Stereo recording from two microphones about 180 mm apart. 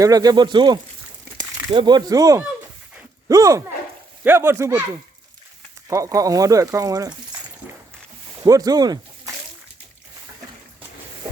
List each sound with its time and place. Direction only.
0.0 s speech: 20° right (ahead or behind)
5.9 s speech: 15° right (ahead or behind)
8.4 s speech: 20° right (ahead or behind)